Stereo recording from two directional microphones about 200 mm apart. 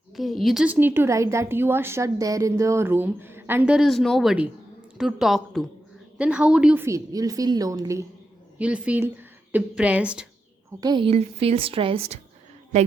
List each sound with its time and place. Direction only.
0.2 s a woman's voice: centre (ahead or behind)
10.8 s a woman's voice: 20° right (ahead or behind)